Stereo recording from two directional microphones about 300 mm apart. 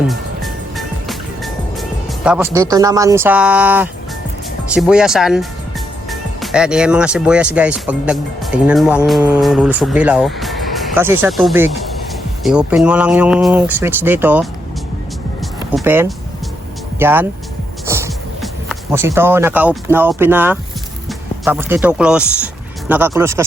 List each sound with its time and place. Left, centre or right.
0.1 s music: centre
1.8 s speech: centre
15.7 s speech: centre